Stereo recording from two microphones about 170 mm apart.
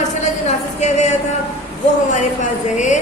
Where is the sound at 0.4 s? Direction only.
40° left (ahead or behind).